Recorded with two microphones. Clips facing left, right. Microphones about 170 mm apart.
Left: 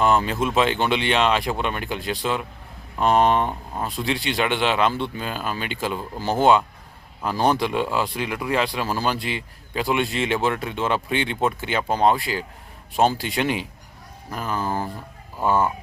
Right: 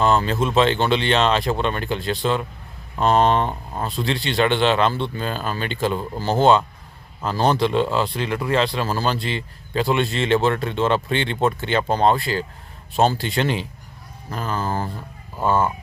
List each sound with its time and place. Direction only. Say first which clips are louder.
0.0 s speech: right 1 dB; 10° left (ahead or behind)